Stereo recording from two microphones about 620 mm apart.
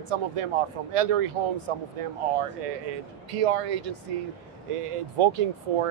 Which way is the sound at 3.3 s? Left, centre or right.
Right.